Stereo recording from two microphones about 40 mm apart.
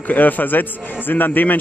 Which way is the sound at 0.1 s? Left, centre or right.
Left.